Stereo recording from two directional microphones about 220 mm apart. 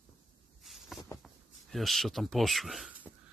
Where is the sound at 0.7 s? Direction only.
Centre (ahead or behind).